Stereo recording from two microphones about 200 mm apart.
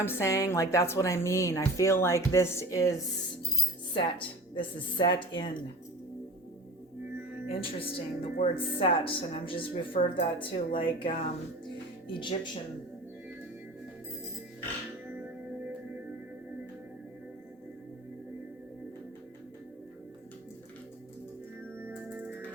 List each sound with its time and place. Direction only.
0.0 s a woman's voice: 10° left (ahead or behind)
7.4 s a woman's voice: 30° left (ahead or behind)
21.8 s music: 10° right (ahead or behind)